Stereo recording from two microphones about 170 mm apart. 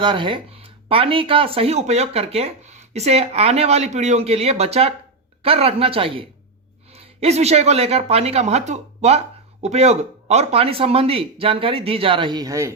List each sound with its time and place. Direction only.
0.0 s speech: 30° right (ahead or behind)